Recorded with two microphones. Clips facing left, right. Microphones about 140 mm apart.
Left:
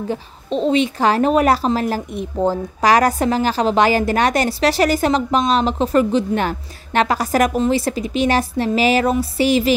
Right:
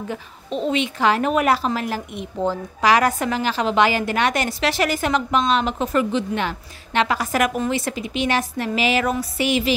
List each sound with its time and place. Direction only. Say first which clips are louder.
0.1 s a woman's voice: left 5 dB; 30° left (ahead or behind)